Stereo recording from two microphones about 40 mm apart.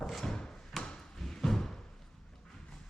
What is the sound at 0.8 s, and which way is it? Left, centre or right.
Thump, centre.